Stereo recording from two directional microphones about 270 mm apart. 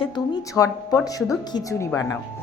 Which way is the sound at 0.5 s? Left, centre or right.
Centre.